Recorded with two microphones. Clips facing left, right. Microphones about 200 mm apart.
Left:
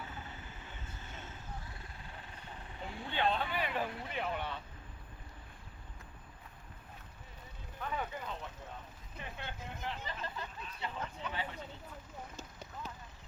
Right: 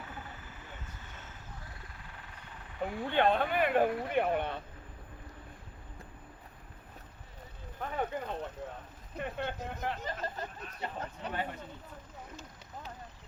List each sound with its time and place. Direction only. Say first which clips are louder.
2.0 s vehicle: left 1 dB; 25° left (ahead or behind)
2.8 s speech: right 7 dB; 55° right (ahead or behind)
7.8 s speech: right 5 dB; 55° right (ahead or behind)